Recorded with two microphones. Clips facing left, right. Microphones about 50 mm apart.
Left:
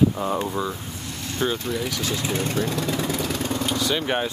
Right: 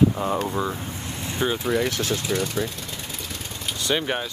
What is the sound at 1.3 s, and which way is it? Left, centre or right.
Speech, centre.